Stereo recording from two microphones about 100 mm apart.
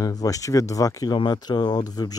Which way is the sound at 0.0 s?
40° left (ahead or behind).